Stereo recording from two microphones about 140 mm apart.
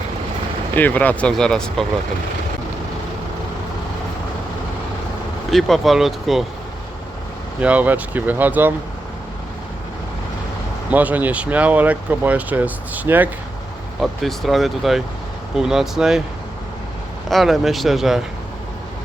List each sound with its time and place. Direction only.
0.8 s speech: 10° left (ahead or behind)
5.5 s speech: centre (ahead or behind)
7.6 s speech: 10° right (ahead or behind)
10.9 s speech: 10° right (ahead or behind)
14.0 s speech: centre (ahead or behind)
17.2 s speech: centre (ahead or behind)